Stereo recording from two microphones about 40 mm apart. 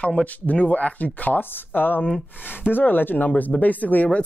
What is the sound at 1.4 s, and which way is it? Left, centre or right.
Speech, left.